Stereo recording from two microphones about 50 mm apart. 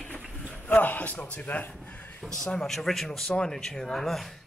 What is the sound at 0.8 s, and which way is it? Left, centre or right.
Speech, left.